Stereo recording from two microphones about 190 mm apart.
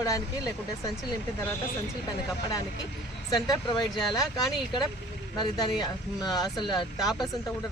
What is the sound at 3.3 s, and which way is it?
Speech, 20° left (ahead or behind).